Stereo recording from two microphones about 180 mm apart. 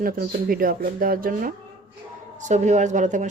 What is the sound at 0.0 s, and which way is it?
Speech, 55° right (ahead or behind).